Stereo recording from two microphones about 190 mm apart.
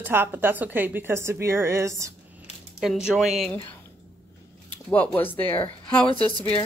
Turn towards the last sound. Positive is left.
turn(degrees=25)  # may be behind; listen again after turning